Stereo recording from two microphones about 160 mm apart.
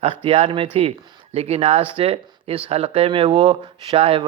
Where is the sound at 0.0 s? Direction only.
35° right (ahead or behind).